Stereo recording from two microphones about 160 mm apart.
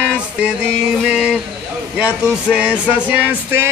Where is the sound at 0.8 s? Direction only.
5° right (ahead or behind).